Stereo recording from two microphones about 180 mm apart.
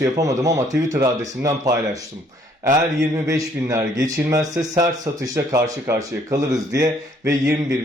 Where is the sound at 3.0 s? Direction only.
15° right (ahead or behind).